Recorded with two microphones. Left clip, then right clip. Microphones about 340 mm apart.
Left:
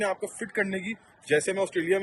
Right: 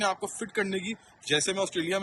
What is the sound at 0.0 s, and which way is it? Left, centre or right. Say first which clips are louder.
A man's voice: even; centre.